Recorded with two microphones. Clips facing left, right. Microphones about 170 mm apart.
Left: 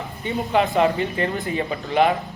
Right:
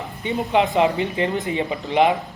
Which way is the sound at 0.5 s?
20° right (ahead or behind).